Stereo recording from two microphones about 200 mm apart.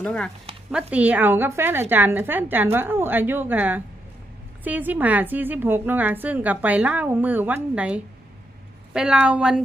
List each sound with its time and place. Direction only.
0.0 s speech: 5° left (ahead or behind)
0.7 s a woman's voice: 5° right (ahead or behind)